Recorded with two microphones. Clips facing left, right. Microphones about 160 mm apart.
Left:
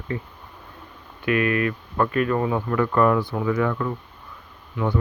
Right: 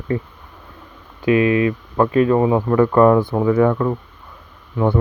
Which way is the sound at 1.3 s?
25° right (ahead or behind).